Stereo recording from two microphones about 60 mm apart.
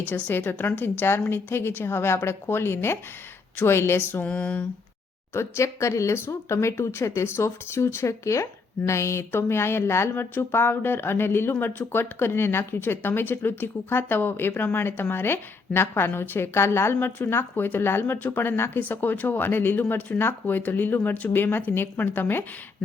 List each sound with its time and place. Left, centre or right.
0.0 s speech: left
4.2 s a sound: left
5.3 s speech: left
10.3 s speech: left